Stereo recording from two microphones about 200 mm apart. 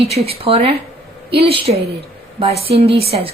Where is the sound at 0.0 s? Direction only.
30° right (ahead or behind).